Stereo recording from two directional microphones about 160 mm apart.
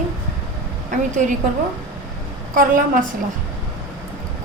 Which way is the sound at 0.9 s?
50° right (ahead or behind).